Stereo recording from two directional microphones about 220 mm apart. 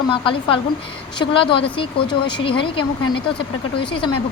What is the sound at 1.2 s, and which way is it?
Speech, 25° left (ahead or behind).